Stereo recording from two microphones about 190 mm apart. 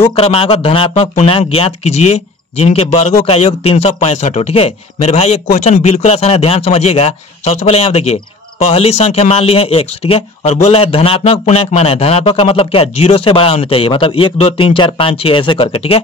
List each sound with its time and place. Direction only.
0.0 s speech: 30° left (ahead or behind)